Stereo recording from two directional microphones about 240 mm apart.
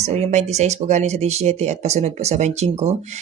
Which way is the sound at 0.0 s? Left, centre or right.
Right.